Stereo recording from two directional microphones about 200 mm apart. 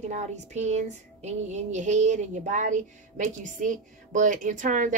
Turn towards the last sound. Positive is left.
turn(degrees=-40)  # may be behind; listen again after turning